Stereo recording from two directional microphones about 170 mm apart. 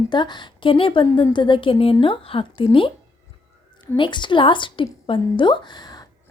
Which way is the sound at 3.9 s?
30° left (ahead or behind).